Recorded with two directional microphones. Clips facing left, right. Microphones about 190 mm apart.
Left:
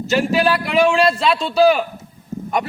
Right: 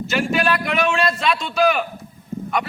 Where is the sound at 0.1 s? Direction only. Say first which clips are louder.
Left 4 dB; 30° left (ahead or behind).